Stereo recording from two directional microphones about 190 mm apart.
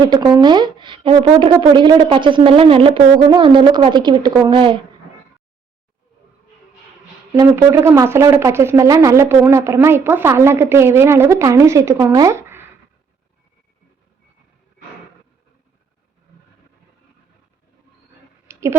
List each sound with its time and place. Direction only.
0.1 s speech: 20° right (ahead or behind)
7.3 s speech: 15° right (ahead or behind)